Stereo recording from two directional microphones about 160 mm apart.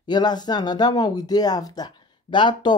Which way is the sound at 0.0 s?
25° left (ahead or behind).